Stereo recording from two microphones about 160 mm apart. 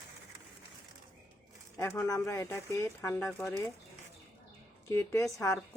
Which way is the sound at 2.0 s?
20° left (ahead or behind).